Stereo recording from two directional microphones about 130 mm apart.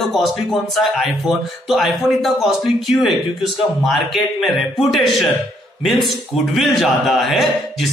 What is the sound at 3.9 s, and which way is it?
Speech, centre (ahead or behind).